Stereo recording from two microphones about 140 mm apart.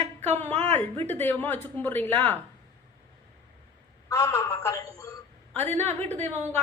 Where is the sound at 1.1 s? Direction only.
15° left (ahead or behind).